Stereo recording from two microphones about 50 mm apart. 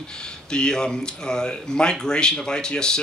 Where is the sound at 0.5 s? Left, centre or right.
Centre.